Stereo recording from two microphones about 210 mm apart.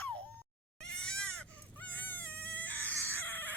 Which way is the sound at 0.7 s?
5° left (ahead or behind).